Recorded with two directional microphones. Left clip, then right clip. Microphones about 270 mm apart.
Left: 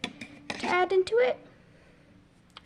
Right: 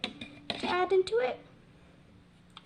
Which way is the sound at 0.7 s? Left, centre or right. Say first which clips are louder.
Left 3 dB; left.